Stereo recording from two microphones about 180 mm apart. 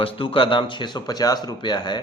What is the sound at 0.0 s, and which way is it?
A man's voice, 30° left (ahead or behind).